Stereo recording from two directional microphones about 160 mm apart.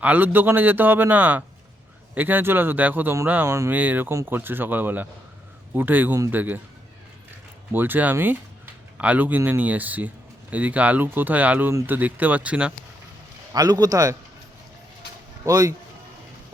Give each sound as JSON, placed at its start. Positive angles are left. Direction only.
{"t": 0.0, "sound": "speech", "side_deg": -10}
{"t": 7.7, "sound": "speech", "side_deg": -10}
{"t": 13.5, "sound": "a man's voice", "side_deg": -25}
{"t": 15.4, "sound": "a man's voice", "side_deg": -20}